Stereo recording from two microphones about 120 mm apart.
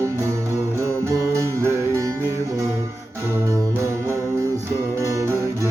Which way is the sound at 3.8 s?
25° right (ahead or behind).